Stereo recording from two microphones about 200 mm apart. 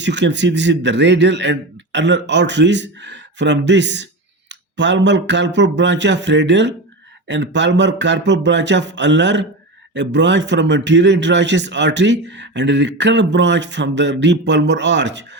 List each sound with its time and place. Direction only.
0.0 s speech: 60° right (ahead or behind)